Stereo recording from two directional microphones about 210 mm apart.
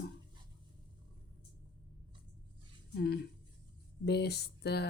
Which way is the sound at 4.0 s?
50° left (ahead or behind).